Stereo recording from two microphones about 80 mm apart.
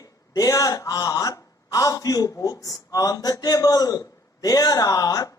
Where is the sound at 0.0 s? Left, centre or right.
Left.